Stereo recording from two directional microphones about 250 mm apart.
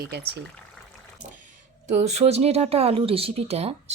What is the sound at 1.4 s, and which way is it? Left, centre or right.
Speech, right.